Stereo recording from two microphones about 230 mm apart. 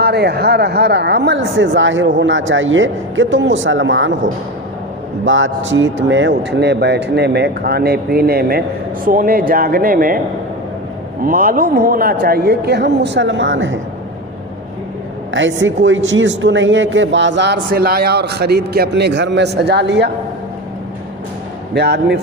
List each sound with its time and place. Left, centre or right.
0.0 s speech: right
5.2 s speech: right
11.3 s speech: right
15.3 s speech: right
21.8 s speech: right